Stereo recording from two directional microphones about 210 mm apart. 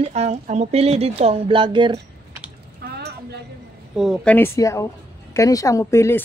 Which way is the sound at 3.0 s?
50° right (ahead or behind).